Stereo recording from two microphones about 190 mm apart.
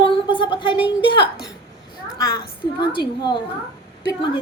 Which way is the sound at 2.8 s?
25° left (ahead or behind).